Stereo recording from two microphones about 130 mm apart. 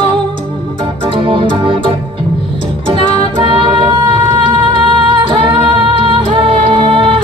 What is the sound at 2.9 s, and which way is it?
Music, 40° right (ahead or behind).